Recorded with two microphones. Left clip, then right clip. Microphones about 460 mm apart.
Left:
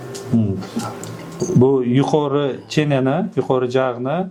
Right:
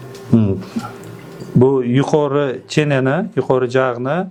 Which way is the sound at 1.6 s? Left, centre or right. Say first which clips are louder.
Right 2 dB; centre.